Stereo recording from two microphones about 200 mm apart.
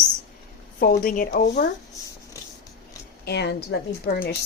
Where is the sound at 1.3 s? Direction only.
55° left (ahead or behind).